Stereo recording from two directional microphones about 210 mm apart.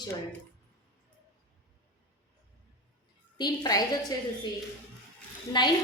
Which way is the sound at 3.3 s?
20° left (ahead or behind).